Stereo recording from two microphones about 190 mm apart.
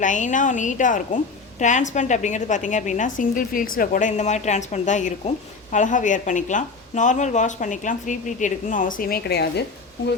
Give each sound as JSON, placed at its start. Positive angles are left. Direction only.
{"t": 0.0, "sound": "a woman's voice", "side_deg": 40}